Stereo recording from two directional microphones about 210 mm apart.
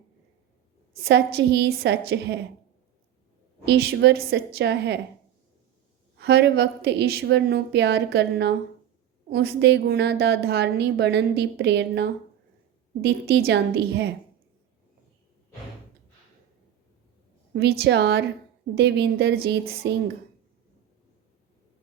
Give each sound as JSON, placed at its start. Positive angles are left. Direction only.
{"t": 1.0, "sound": "a woman's voice", "side_deg": -55}
{"t": 3.7, "sound": "a woman's voice", "side_deg": -55}
{"t": 6.1, "sound": "a woman's voice", "side_deg": -55}
{"t": 17.5, "sound": "a woman's voice", "side_deg": -50}